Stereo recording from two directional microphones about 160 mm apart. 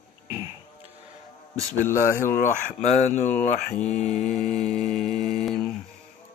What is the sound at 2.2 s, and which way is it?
Speech, 55° left (ahead or behind).